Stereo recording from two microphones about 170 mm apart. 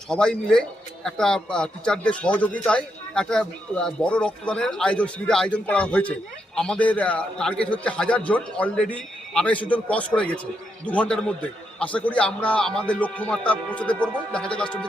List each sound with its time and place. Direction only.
0.1 s a man's voice: 5° left (ahead or behind)